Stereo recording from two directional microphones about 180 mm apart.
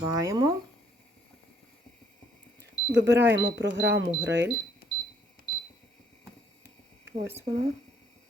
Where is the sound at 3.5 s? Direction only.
90° right.